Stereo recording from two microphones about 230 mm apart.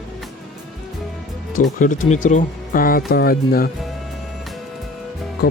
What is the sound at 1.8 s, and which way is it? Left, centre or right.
Speech, left.